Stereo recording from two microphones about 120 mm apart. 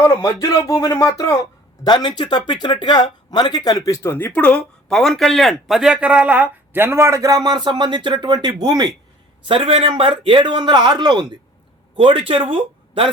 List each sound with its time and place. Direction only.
0.0 s speech: 25° left (ahead or behind)
1.8 s speech: 40° left (ahead or behind); by 8.9 s 35° right (ahead or behind)
9.5 s a man's voice: 50° right (ahead or behind)